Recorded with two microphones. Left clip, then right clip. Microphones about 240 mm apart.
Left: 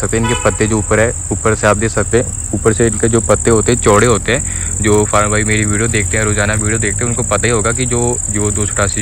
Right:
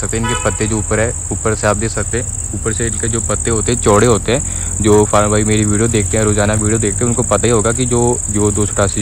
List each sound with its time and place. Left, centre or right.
0.0 s cricket: centre
4.8 s speech: centre